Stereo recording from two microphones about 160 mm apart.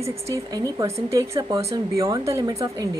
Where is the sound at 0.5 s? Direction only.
25° right (ahead or behind).